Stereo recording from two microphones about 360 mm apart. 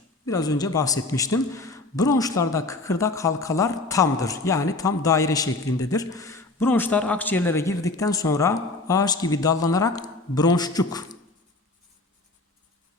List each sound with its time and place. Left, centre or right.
0.3 s a man's voice: centre